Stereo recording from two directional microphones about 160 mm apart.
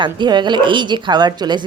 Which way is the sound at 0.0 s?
30° right (ahead or behind).